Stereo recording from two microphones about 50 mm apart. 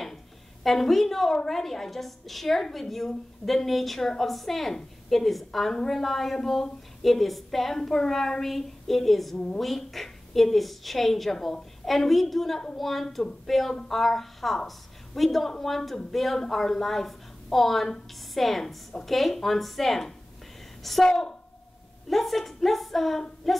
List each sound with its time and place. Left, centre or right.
0.7 s a woman's voice: centre
22.1 s a woman's voice: centre